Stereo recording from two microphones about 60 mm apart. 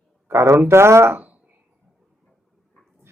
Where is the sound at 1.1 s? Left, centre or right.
Right.